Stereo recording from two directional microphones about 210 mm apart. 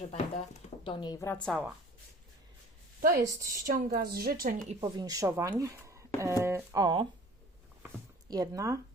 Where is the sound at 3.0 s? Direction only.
40° right (ahead or behind).